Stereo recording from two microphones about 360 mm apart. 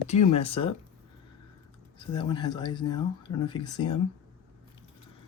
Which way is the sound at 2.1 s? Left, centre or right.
Centre.